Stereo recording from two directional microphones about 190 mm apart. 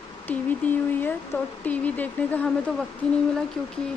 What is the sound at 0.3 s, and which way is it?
Speech, 10° left (ahead or behind).